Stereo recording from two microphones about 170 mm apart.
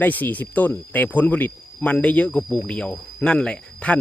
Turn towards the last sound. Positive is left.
turn(degrees=5)  # may be behind; listen again after turning